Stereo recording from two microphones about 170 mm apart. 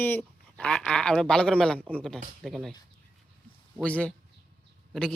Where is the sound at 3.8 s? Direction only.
5° left (ahead or behind).